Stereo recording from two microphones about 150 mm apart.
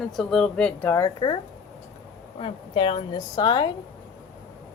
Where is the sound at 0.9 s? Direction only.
30° left (ahead or behind).